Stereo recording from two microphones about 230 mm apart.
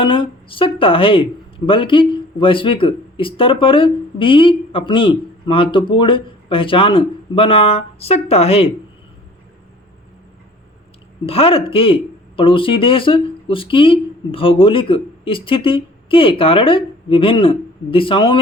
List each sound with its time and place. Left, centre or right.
0.0 s speech: left
11.3 s speech: left